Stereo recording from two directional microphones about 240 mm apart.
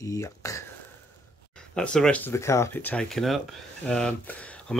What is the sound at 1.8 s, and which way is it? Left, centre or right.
Speech, centre.